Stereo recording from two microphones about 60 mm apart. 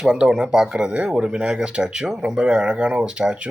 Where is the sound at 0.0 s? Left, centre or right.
Centre.